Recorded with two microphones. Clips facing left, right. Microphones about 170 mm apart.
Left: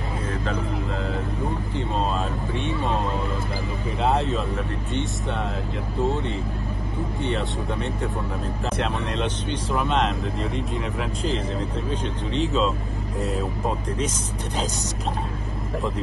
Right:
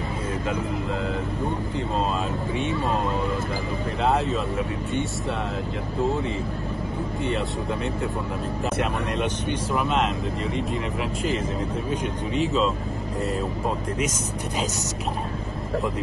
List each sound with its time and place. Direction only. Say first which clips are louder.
4.0 s speech: even; centre (ahead or behind)
6.0 s speech: even; centre (ahead or behind)